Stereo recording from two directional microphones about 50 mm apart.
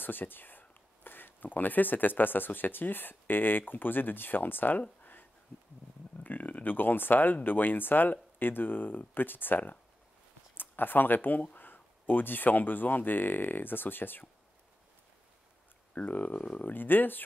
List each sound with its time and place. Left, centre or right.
0.0 s speech: left
6.1 s speech: left
15.9 s speech: left
16.6 s speech: left